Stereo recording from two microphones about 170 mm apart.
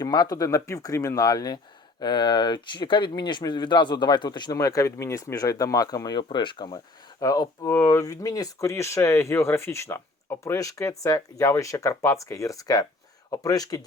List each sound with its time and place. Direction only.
0.0 s speech: 20° left (ahead or behind)